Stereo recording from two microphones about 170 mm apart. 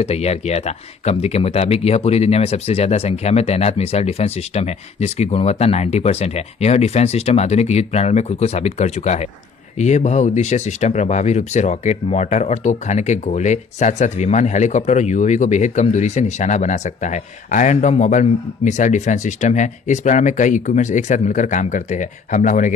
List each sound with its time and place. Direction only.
0.0 s speech: 40° left (ahead or behind)